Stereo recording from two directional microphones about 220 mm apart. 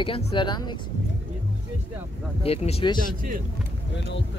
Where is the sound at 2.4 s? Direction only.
30° left (ahead or behind).